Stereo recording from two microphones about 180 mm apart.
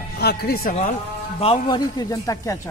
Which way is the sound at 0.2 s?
60° left (ahead or behind).